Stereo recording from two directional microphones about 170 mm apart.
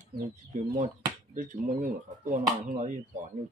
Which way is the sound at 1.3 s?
50° right (ahead or behind).